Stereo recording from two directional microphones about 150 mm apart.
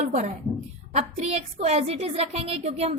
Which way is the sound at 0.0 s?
55° right (ahead or behind).